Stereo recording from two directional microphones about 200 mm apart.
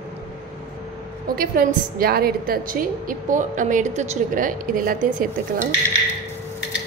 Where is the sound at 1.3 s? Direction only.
45° right (ahead or behind).